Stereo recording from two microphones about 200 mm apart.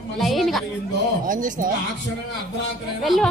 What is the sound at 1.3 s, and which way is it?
Speech, 40° right (ahead or behind).